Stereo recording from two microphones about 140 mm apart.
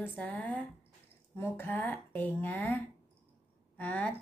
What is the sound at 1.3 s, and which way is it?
Child singing, 15° left (ahead or behind).